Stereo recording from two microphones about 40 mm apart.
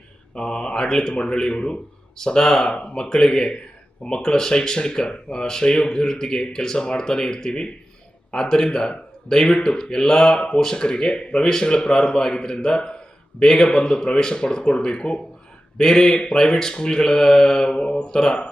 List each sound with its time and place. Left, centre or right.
0.3 s a man's voice: left